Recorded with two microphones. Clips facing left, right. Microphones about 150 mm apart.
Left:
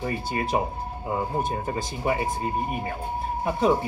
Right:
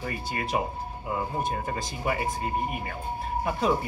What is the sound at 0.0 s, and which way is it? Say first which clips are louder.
Speech: left 4 dB; 30° left (ahead or behind).